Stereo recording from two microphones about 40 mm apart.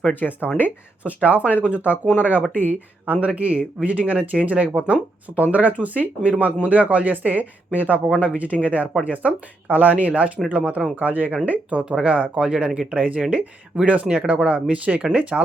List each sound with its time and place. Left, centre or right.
0.1 s speech: left
1.0 s speech: right